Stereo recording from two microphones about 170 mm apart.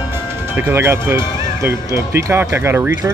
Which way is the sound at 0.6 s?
15° right (ahead or behind).